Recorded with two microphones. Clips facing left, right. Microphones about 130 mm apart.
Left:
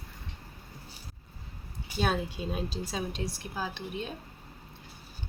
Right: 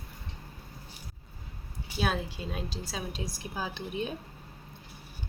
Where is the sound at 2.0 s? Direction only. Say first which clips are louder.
Left 2 dB; centre (ahead or behind).